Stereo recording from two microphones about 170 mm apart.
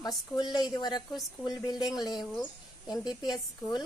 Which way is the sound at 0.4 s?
25° left (ahead or behind).